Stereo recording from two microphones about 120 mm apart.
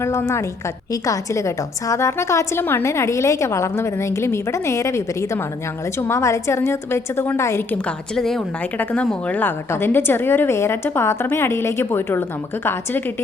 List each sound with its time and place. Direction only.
0.0 s a woman's voice: 25° left (ahead or behind)
7.9 s a woman's voice: 5° left (ahead or behind)
8.8 s a woman's voice: 15° left (ahead or behind)